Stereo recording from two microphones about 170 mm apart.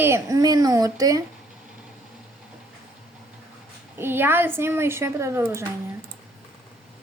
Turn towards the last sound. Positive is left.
turn(degrees=-15)  # may be behind; listen again after turning